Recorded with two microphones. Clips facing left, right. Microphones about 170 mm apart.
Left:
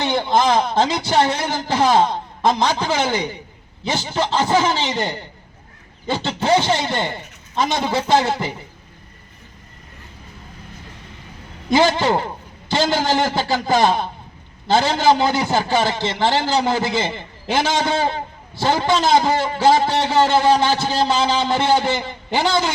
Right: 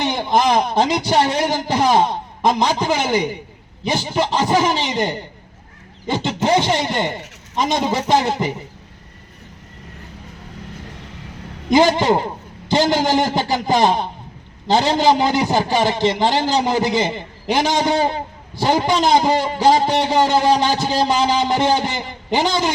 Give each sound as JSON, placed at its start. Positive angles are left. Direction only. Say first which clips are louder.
{"t": 0.0, "sound": "a man's voice", "louder": "even", "side_deg": -15}
{"t": 11.7, "sound": "a man's voice", "louder": "right 2 dB", "side_deg": -15}